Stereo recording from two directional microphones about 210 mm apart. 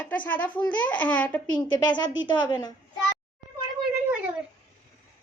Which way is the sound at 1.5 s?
20° left (ahead or behind).